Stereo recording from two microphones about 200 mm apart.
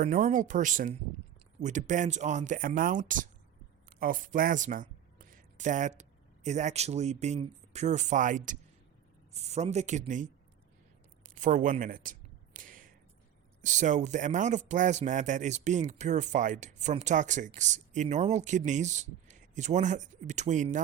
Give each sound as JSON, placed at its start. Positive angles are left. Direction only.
{"t": 0.0, "sound": "speech", "side_deg": -40}
{"t": 12.5, "sound": "a sound", "side_deg": -40}
{"t": 13.6, "sound": "speech", "side_deg": -40}